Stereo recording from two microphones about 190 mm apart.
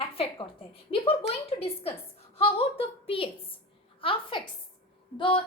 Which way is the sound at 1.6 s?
30° left (ahead or behind).